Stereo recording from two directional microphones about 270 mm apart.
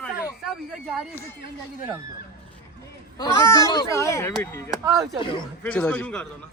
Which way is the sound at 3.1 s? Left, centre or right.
Centre.